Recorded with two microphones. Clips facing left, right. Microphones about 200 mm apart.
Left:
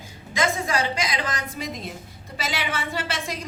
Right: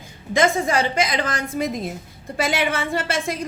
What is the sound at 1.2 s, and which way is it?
A woman's voice, 55° right (ahead or behind).